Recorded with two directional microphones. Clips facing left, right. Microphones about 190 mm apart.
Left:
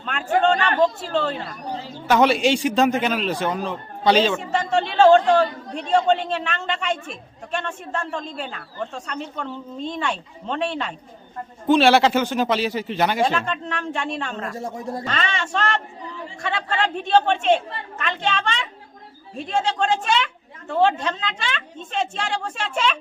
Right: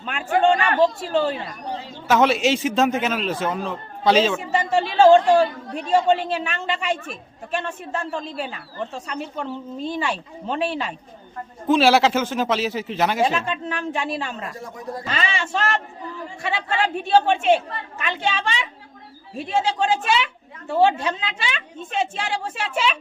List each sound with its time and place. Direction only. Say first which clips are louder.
0.0 s a sound: even; 10° right (ahead or behind)
0.4 s a woman's voice: right 2 dB; 10° right (ahead or behind)
14.6 s speech: left 3 dB; 25° left (ahead or behind)
15.0 s a man's voice: right 3 dB; 5° right (ahead or behind)